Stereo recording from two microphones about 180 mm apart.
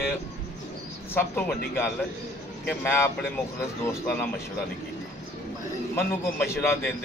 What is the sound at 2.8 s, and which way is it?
Speech, 15° left (ahead or behind).